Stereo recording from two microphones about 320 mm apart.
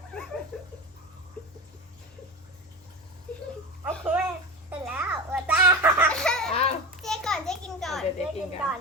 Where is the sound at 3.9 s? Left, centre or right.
Centre.